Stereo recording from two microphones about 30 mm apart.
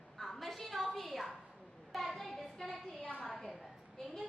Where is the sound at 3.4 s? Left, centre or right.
Centre.